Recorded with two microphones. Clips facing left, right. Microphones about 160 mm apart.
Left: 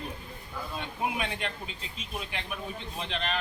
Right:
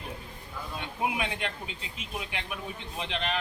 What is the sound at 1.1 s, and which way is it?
Speech, 15° right (ahead or behind).